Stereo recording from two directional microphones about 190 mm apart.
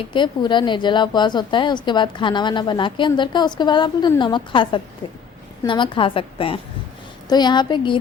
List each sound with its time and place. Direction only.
0.0 s a woman's voice: 25° left (ahead or behind)